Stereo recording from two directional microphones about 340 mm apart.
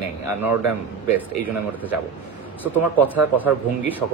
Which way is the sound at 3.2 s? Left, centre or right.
Centre.